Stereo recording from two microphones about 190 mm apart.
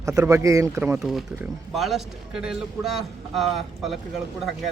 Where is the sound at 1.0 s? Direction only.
Centre (ahead or behind).